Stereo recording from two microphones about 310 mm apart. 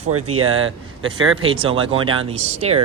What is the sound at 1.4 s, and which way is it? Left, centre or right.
Speech, centre.